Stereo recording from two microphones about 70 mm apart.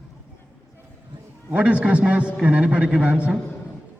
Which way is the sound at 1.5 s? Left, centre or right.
Centre.